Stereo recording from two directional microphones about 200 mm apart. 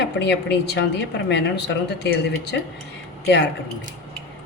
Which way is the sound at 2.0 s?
60° left (ahead or behind).